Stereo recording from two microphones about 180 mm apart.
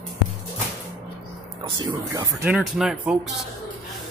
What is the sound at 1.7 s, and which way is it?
Speech, 20° right (ahead or behind).